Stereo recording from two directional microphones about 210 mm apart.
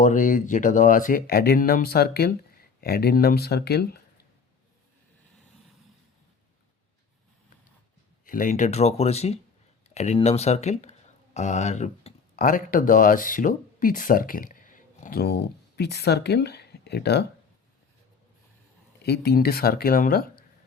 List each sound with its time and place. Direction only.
0.0 s speech: 40° left (ahead or behind)
8.2 s speech: 40° left (ahead or behind)
19.0 s speech: 50° left (ahead or behind)